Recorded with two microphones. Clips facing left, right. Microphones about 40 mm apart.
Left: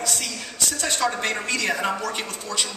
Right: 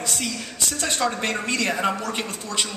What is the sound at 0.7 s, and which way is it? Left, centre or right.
Speech, right.